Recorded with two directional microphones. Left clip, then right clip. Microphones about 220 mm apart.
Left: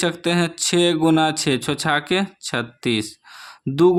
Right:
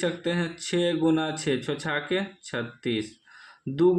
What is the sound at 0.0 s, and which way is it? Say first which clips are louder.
Speech: left 7 dB; 40° left (ahead or behind).